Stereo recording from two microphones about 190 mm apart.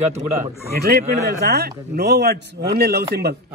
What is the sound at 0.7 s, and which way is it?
Speech, 60° right (ahead or behind).